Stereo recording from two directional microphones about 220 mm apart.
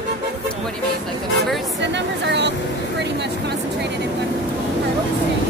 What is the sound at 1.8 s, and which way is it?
Speech, 50° right (ahead or behind).